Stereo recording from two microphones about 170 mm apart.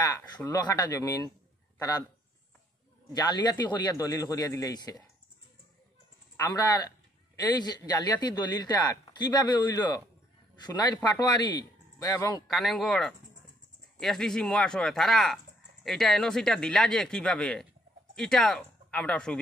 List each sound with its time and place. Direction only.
0.4 s speech: 20° left (ahead or behind)
3.1 s speech: 25° left (ahead or behind)
6.3 s a man's voice: 20° left (ahead or behind)
12.4 s speech: centre (ahead or behind)